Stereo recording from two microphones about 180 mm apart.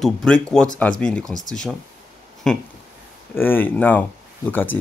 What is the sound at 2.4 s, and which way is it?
Speech, 5° left (ahead or behind).